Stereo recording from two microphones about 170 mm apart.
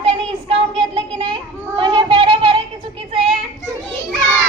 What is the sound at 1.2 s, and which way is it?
Children playing, 30° right (ahead or behind).